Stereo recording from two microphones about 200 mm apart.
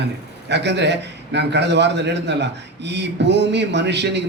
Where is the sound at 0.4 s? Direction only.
60° right (ahead or behind).